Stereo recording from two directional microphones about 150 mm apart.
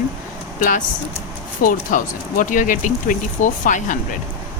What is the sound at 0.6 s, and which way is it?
A woman's voice, 60° left (ahead or behind).